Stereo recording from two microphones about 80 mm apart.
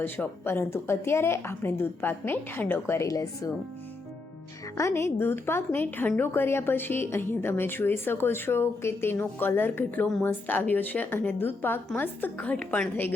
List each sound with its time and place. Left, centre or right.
0.4 s a woman's voice: left
3.1 s speech: left
4.8 s a woman's voice: left; by 12.8 s centre